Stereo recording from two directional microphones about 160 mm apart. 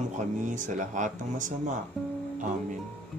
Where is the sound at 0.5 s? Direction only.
55° right (ahead or behind).